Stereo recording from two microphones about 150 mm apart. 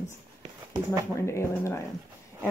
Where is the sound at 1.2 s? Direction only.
20° left (ahead or behind).